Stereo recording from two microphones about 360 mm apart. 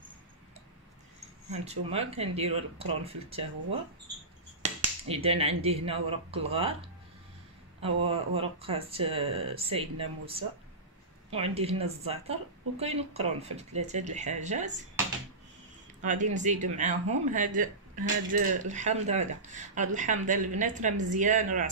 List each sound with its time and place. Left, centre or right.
1.5 s speech: centre
4.6 s speech: centre
16.0 s speech: right